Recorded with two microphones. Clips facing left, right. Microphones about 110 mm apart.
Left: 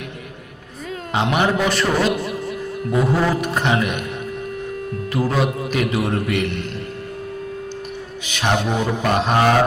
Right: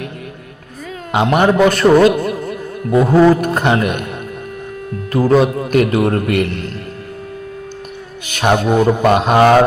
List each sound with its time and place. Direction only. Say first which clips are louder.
1.1 s a man's voice: right 6 dB; 45° right (ahead or behind)
5.1 s a man's voice: right 8 dB; 50° right (ahead or behind)
8.3 s a man's voice: right 6 dB; 50° right (ahead or behind)